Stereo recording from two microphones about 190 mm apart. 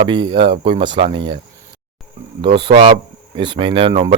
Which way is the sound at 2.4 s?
25° right (ahead or behind).